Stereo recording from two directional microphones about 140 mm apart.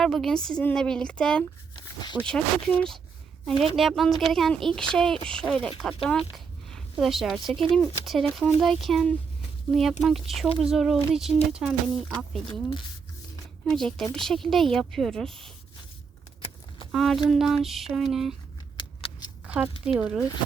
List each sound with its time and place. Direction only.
0.0 s speech: centre (ahead or behind)
1.7 s a sound: 30° left (ahead or behind)
2.2 s speech: 5° left (ahead or behind)
13.7 s speech: 5° left (ahead or behind)
16.4 s a sound: 40° left (ahead or behind)
16.9 s speech: centre (ahead or behind)
18.8 s scissors: 35° left (ahead or behind)
19.5 s speech: 10° right (ahead or behind)